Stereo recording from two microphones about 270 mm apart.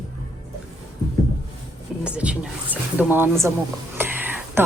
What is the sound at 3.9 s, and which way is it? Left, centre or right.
Whispering, centre.